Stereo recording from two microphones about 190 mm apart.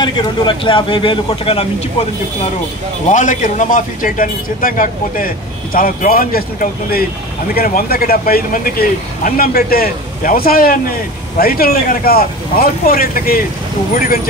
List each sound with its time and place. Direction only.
0.0 s a man's voice: 25° left (ahead or behind)
3.1 s a man's voice: 40° left (ahead or behind)